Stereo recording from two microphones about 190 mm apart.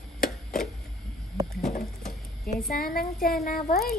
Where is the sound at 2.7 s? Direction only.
55° left (ahead or behind).